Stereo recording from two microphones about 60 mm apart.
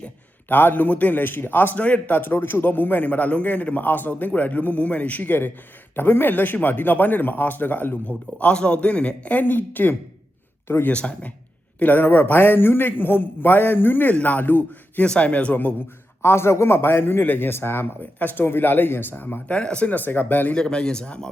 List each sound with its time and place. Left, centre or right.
0.4 s a man's voice: left
10.8 s a man's voice: left
11.8 s speech: left
15.0 s a man's voice: centre
16.2 s speech: left
19.5 s a man's voice: centre
20.5 s a man's voice: centre